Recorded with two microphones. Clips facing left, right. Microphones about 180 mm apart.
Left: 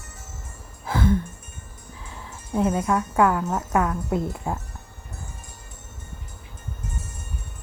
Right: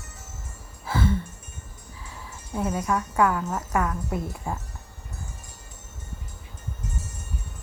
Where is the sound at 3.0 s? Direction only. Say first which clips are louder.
Even; 10° left (ahead or behind).